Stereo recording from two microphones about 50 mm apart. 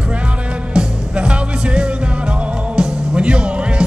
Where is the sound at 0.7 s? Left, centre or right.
Right.